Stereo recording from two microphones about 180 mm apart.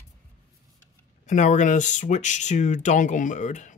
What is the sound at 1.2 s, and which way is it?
Speech, 40° left (ahead or behind).